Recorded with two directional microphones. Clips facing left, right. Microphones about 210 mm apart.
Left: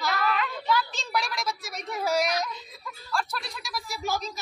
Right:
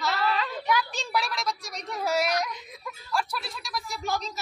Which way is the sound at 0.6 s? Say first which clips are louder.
Even; 15° right (ahead or behind).